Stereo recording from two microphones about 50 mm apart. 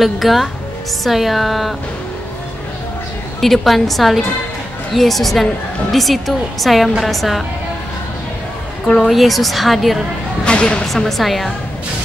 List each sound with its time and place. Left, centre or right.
0.0 s a woman's voice: centre
3.3 s a woman's voice: centre
9.0 s a woman's voice: centre
10.4 s speech: left
10.9 s a woman's voice: centre